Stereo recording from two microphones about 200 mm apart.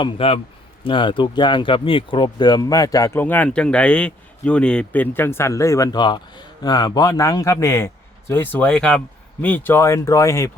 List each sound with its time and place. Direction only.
0.0 s a man's voice: 30° left (ahead or behind)